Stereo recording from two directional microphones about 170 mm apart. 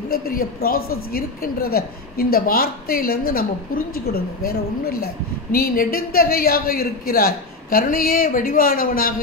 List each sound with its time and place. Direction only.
0.1 s a woman's voice: 60° left (ahead or behind)